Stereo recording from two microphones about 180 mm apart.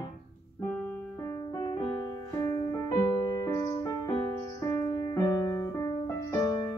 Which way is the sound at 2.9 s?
15° left (ahead or behind).